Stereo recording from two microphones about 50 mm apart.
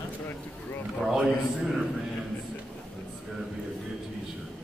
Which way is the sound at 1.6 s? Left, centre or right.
Centre.